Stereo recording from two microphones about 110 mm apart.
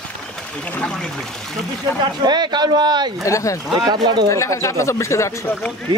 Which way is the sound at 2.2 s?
40° right (ahead or behind).